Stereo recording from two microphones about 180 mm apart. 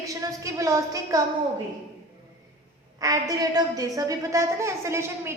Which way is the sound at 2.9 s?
20° right (ahead or behind).